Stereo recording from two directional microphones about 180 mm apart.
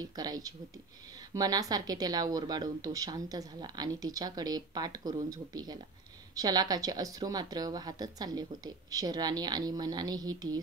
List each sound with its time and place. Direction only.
0.0 s a woman's voice: 20° right (ahead or behind)